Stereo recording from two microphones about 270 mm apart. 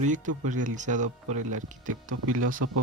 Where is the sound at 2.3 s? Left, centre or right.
Right.